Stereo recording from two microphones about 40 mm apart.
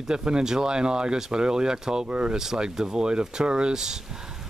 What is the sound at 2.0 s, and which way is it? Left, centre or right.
Speech, right.